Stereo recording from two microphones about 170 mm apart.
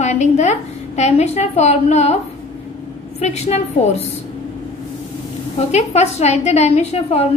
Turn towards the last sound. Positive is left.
turn(degrees=40)  # may be behind; listen again after turning